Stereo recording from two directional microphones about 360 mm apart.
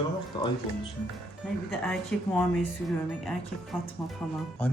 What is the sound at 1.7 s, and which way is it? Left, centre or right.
Speech, centre.